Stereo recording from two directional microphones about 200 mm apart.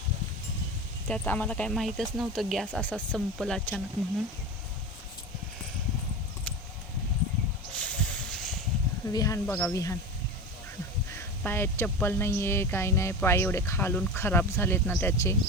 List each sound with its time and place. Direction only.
1.0 s speech: 5° left (ahead or behind)
7.7 s a sound: 5° left (ahead or behind)
9.1 s speech: 15° left (ahead or behind)
11.1 s speech: 10° left (ahead or behind)